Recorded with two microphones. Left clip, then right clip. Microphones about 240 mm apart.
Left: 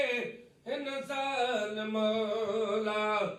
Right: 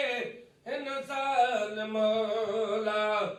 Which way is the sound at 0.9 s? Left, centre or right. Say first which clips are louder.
Right 4 dB; right.